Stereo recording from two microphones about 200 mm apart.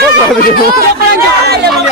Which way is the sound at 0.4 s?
50° left (ahead or behind).